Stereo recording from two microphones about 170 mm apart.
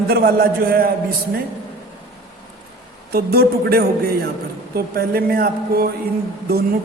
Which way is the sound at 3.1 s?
65° right (ahead or behind).